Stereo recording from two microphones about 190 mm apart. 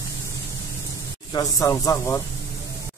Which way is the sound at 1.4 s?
20° left (ahead or behind).